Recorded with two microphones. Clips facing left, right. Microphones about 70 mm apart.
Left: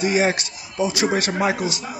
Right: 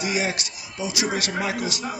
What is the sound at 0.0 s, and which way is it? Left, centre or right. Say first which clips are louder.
A man's voice: left 6 dB; left.